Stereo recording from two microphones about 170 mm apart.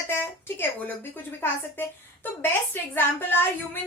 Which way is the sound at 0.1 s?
15° left (ahead or behind).